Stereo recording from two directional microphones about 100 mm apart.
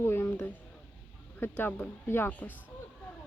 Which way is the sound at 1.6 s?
15° left (ahead or behind).